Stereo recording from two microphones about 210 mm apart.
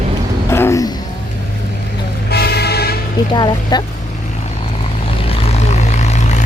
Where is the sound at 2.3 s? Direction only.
50° left (ahead or behind).